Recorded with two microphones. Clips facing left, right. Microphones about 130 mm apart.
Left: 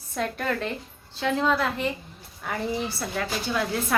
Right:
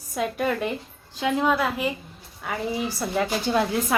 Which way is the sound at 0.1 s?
10° right (ahead or behind).